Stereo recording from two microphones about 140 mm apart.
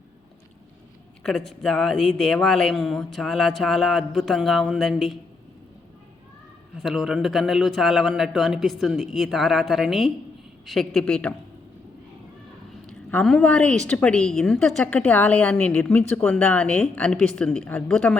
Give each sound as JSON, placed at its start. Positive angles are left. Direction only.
{"t": 1.2, "sound": "speech", "side_deg": 5}
{"t": 6.8, "sound": "a woman's voice", "side_deg": 0}
{"t": 12.9, "sound": "a sound", "side_deg": 15}
{"t": 13.2, "sound": "a woman's voice", "side_deg": 5}